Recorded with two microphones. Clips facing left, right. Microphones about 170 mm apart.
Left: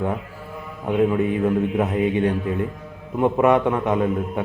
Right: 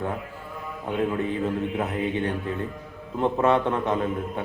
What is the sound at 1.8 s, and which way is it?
A man's voice, 20° left (ahead or behind).